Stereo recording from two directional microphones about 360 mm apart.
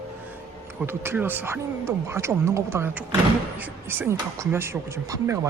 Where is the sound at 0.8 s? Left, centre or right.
Centre.